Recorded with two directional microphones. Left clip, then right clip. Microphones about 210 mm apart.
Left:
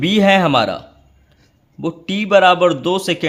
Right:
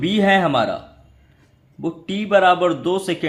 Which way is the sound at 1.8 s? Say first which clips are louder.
Left 4 dB; 35° left (ahead or behind).